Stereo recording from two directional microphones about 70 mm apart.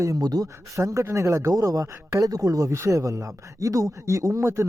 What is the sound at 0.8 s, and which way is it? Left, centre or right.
Speech, right.